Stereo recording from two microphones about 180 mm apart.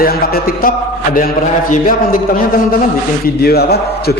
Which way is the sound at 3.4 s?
60° left (ahead or behind).